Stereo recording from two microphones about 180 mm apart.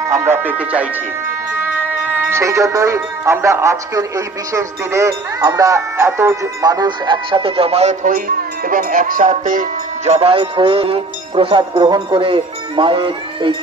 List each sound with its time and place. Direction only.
0.1 s speech: 15° right (ahead or behind); by 8.1 s 35° right (ahead or behind)
8.6 s speech: 50° right (ahead or behind); by 13.6 s 30° right (ahead or behind)